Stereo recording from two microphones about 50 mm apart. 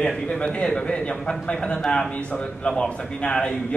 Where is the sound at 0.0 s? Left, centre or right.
Centre.